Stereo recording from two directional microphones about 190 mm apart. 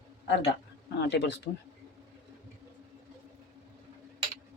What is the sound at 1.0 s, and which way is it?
Speech, 65° left (ahead or behind).